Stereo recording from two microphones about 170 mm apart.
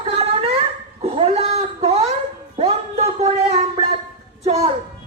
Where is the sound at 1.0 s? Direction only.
35° right (ahead or behind).